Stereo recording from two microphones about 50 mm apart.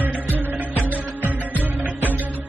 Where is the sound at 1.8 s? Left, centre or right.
Right.